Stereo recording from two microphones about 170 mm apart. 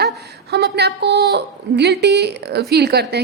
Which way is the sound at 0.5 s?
80° right.